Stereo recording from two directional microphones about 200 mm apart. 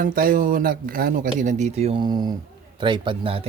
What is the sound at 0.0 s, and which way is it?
A man's voice, 45° right (ahead or behind).